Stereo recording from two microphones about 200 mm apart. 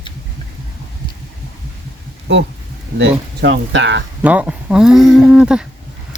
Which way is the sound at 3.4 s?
65° right (ahead or behind).